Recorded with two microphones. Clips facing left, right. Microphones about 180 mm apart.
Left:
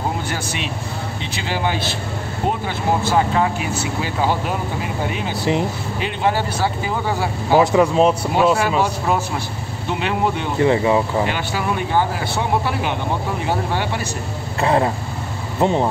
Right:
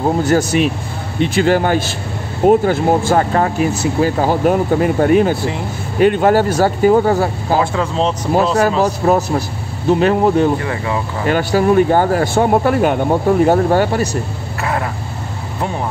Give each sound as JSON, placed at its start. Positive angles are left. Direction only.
{"t": 0.2, "sound": "speech", "side_deg": -40}
{"t": 5.4, "sound": "speech", "side_deg": 20}
{"t": 5.9, "sound": "speech", "side_deg": -50}
{"t": 7.5, "sound": "speech", "side_deg": 20}
{"t": 8.5, "sound": "speech", "side_deg": -35}
{"t": 10.6, "sound": "speech", "side_deg": 25}
{"t": 11.2, "sound": "speech", "side_deg": -45}
{"t": 14.6, "sound": "speech", "side_deg": 30}